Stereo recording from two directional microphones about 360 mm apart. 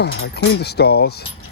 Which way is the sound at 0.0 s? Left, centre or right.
Left.